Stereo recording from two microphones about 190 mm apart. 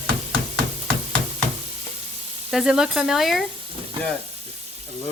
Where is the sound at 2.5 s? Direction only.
Centre (ahead or behind).